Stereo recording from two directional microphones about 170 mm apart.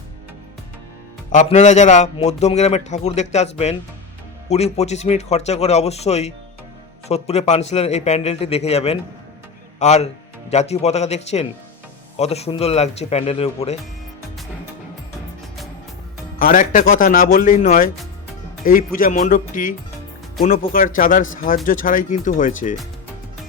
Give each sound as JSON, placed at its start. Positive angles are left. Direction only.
{"t": 1.3, "sound": "a man's voice", "side_deg": 45}
{"t": 16.4, "sound": "speech", "side_deg": 55}